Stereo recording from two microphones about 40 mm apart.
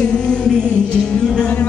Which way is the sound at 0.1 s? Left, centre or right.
Centre.